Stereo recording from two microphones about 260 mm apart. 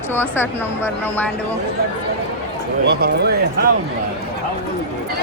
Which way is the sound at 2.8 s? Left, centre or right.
Right.